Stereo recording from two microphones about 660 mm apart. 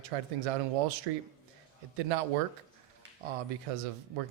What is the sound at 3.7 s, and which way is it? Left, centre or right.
Speech, right.